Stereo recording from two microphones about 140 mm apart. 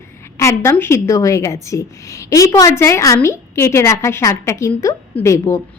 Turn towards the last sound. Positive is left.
turn(degrees=20)  # may be behind; listen again after turning